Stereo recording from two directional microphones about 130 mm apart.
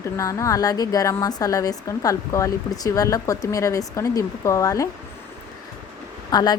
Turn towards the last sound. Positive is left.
turn(degrees=30)  # may be behind; listen again after turning